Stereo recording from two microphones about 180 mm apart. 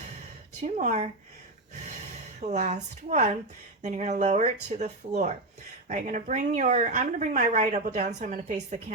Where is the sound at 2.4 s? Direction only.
40° right (ahead or behind).